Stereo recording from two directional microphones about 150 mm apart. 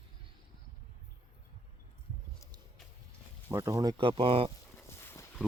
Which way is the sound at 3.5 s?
20° right (ahead or behind).